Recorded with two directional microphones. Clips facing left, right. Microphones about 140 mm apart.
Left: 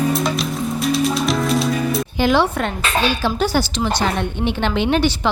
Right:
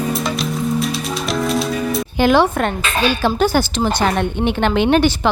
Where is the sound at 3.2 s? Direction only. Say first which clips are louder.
Right 3 dB; 50° right (ahead or behind).